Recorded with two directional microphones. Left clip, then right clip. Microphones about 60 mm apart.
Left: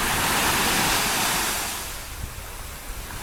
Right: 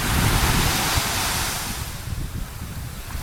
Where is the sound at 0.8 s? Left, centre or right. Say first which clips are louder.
Left 1 dB; centre.